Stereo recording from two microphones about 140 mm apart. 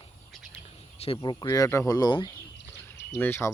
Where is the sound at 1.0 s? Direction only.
35° left (ahead or behind).